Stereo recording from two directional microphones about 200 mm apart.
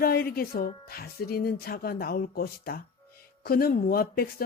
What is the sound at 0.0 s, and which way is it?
Speech, 50° left (ahead or behind).